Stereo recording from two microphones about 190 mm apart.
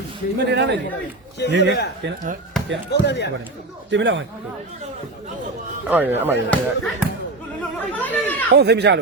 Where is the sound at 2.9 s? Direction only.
65° left (ahead or behind).